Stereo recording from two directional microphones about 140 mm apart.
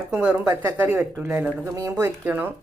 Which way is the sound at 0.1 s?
10° right (ahead or behind).